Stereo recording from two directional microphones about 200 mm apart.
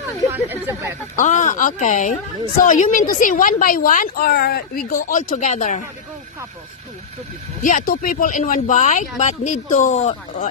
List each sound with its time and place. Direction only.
0.3 s speech: 10° right (ahead or behind)
1.1 s a woman's voice: 35° left (ahead or behind)
7.6 s a woman's voice: 45° left (ahead or behind)